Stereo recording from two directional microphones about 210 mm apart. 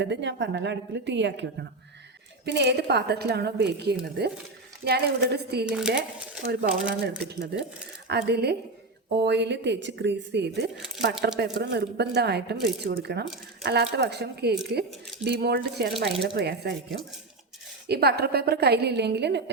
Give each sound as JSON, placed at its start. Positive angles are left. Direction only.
{"t": 0.0, "sound": "speech", "side_deg": -55}
{"t": 5.6, "sound": "speech", "side_deg": -5}
{"t": 6.4, "sound": "speech", "side_deg": -55}